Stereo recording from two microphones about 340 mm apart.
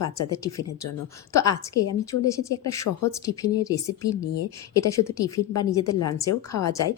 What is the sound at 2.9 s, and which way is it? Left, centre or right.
Speech, left.